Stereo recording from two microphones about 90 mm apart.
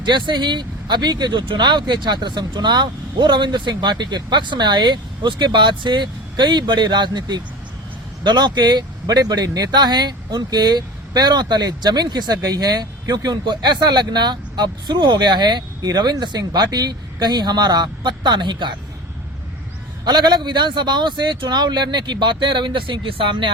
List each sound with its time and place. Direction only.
0.0 s speech: 60° right (ahead or behind)
20.1 s speech: 55° right (ahead or behind)